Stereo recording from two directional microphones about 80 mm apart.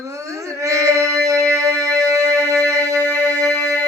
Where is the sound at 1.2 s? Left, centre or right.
Right.